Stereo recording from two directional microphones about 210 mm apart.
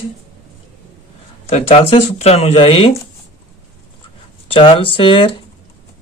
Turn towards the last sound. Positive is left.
turn(degrees=25)  # may be behind; listen again after turning